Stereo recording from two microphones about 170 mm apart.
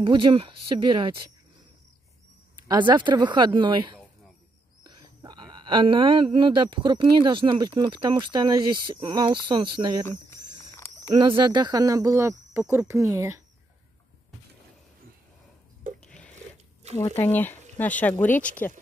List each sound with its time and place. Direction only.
0.0 s speech: 30° right (ahead or behind)
2.9 s speech: 25° right (ahead or behind)
10.0 s a sound: 15° left (ahead or behind)
11.1 s speech: 30° right (ahead or behind)
16.0 s a sound: 5° left (ahead or behind)
16.8 s speech: 40° right (ahead or behind)
17.2 s speech: 10° left (ahead or behind)